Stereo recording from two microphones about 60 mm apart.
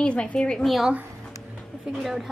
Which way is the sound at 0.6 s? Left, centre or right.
Centre.